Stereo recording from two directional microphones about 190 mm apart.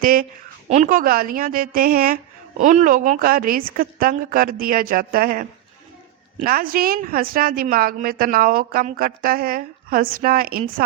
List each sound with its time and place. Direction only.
0.0 s a woman's voice: 50° right (ahead or behind)